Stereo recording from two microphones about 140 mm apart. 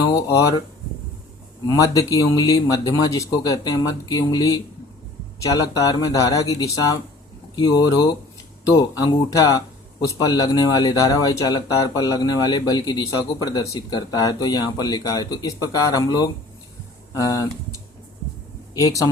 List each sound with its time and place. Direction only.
0.0 s speech: 25° left (ahead or behind)
1.7 s speech: 25° left (ahead or behind)